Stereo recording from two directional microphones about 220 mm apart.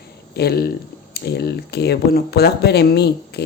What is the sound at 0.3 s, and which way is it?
Speech, 45° left (ahead or behind).